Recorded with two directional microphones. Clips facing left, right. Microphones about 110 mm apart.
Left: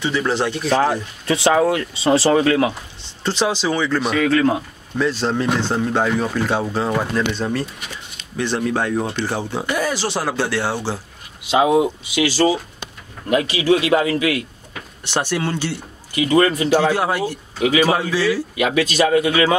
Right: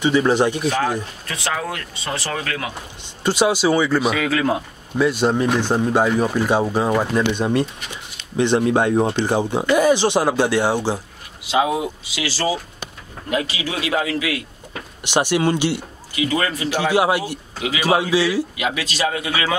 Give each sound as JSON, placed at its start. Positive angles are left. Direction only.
{"t": 0.0, "sound": "speech", "side_deg": -15}
{"t": 1.2, "sound": "speech", "side_deg": 25}
{"t": 3.3, "sound": "speech", "side_deg": -10}
{"t": 11.5, "sound": "speech", "side_deg": 25}
{"t": 13.8, "sound": "a man's voice", "side_deg": 40}
{"t": 15.0, "sound": "speech", "side_deg": -15}
{"t": 16.2, "sound": "a man's voice", "side_deg": 35}
{"t": 16.7, "sound": "speech", "side_deg": -15}
{"t": 19.0, "sound": "a man's voice", "side_deg": 35}